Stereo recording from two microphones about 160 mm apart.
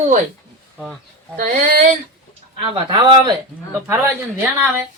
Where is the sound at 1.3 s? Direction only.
70° right (ahead or behind).